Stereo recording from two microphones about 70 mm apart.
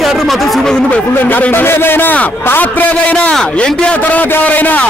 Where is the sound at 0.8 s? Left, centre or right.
Left.